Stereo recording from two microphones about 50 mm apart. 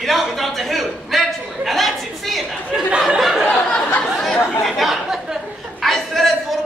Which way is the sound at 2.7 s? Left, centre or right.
Centre.